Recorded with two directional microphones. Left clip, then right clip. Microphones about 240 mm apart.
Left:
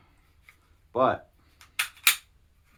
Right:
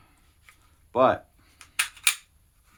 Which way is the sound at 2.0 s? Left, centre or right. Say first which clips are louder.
Left 3 dB; centre.